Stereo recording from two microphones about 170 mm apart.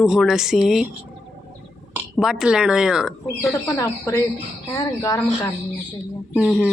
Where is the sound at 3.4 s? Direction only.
20° left (ahead or behind).